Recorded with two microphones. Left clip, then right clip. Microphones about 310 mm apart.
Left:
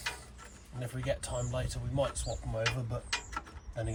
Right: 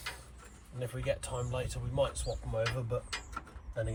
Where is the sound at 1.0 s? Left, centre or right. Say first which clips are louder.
Left 1 dB; centre.